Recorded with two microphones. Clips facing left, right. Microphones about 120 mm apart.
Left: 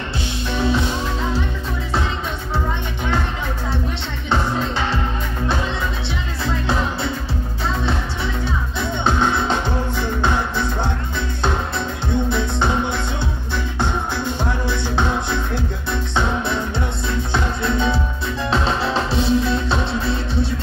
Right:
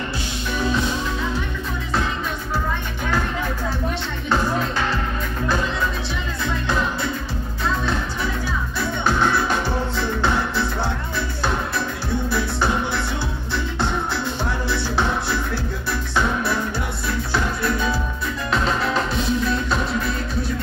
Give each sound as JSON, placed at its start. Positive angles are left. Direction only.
{"t": 0.5, "sound": "music", "side_deg": 30}
{"t": 8.7, "sound": "music", "side_deg": 20}
{"t": 12.3, "sound": "music", "side_deg": 20}